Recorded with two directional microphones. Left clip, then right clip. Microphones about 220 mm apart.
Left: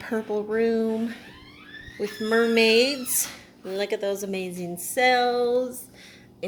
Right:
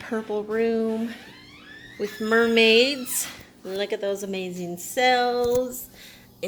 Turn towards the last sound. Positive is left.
turn(degrees=-5)  # may be behind; listen again after turning